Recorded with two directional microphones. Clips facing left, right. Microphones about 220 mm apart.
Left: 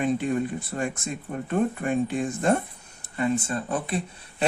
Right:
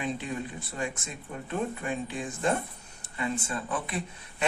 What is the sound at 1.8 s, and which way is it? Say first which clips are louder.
Speech: left 8 dB; 50° left (ahead or behind).